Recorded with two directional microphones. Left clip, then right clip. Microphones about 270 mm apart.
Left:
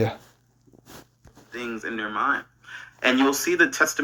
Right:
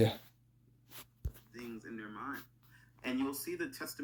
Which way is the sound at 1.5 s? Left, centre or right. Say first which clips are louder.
Left 17 dB; left.